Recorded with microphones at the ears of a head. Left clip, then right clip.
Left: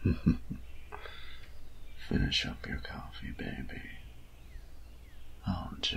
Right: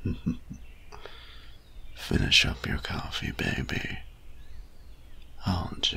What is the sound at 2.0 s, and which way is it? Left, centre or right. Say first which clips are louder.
Speech: right 10 dB; right.